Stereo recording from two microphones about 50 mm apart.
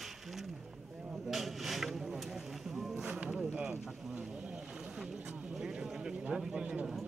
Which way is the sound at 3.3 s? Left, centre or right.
Centre.